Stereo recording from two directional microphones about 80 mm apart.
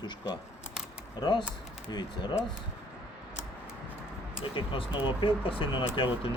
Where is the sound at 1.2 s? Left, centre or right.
Left.